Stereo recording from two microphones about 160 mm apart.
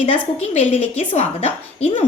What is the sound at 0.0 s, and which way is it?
A woman's voice, 40° left (ahead or behind).